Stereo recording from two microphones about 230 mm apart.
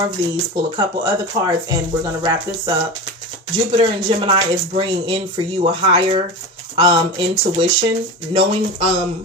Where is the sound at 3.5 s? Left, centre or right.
Right.